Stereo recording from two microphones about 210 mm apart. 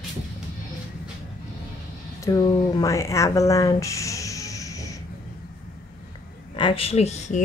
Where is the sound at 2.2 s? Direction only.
15° left (ahead or behind).